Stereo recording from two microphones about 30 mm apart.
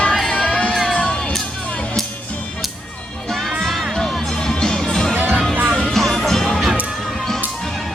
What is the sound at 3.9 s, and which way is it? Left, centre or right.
Music, centre.